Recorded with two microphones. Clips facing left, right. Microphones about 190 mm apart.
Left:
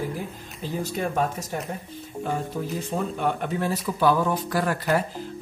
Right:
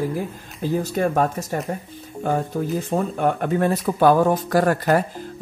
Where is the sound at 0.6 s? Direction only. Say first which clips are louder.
Right 7 dB; 50° right (ahead or behind).